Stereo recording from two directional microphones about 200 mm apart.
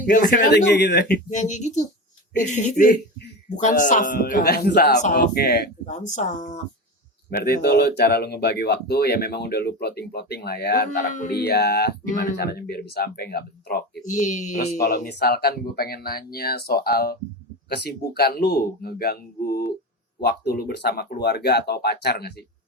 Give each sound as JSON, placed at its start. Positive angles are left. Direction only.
{"t": 0.0, "sound": "speech", "side_deg": 45}
{"t": 1.3, "sound": "speech", "side_deg": 35}
{"t": 4.9, "sound": "speech", "side_deg": 40}
{"t": 5.9, "sound": "speech", "side_deg": 40}
{"t": 7.3, "sound": "speech", "side_deg": 50}
{"t": 11.4, "sound": "speech", "side_deg": 55}
{"t": 14.3, "sound": "speech", "side_deg": 40}